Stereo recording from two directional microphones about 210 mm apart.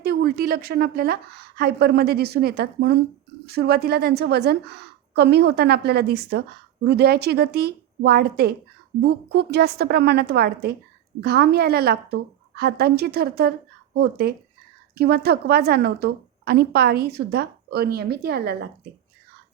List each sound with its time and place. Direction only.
0.0 s a woman's voice: 50° right (ahead or behind)